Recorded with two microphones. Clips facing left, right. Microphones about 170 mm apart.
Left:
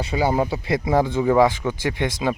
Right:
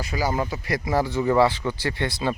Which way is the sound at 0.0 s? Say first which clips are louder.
Left 5 dB; 25° left (ahead or behind).